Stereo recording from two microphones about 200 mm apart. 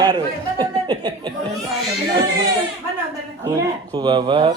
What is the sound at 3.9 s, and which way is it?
Speech, 20° right (ahead or behind).